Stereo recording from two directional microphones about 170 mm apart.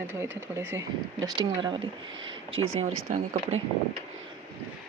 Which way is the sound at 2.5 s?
40° right (ahead or behind).